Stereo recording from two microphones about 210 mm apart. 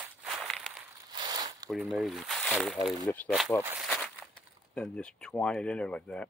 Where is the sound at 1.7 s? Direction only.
Centre (ahead or behind).